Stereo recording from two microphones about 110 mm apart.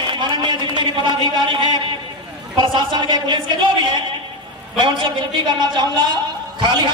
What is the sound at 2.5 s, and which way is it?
A woman's voice, 45° right (ahead or behind).